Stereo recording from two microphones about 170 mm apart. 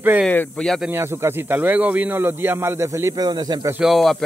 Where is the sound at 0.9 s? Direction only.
15° right (ahead or behind).